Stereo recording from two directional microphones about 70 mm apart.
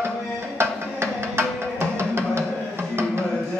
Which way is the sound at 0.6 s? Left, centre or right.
Right.